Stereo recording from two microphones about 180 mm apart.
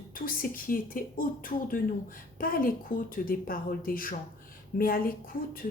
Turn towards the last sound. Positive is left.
turn(degrees=50)  # may be behind; listen again after turning